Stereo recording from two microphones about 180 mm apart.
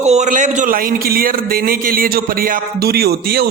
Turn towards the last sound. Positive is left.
turn(degrees=-60)  # may be behind; listen again after turning